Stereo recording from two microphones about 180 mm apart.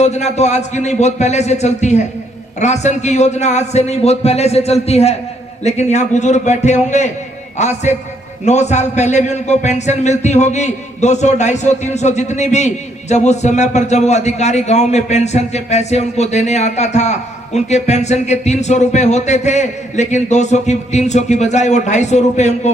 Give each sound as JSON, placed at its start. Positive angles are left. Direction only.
{"t": 0.0, "sound": "a man's voice", "side_deg": 40}